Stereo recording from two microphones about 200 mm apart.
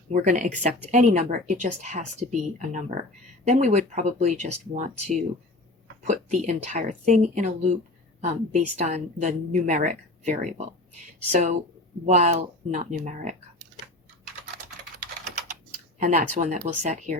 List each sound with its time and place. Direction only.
0.1 s speech: 40° right (ahead or behind)
16.0 s speech: 35° right (ahead or behind)